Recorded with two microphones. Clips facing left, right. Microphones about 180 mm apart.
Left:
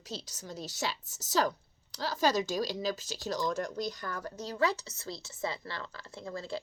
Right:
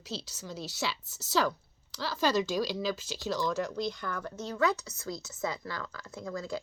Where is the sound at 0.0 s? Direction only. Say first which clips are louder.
Right 2 dB; 45° left (ahead or behind).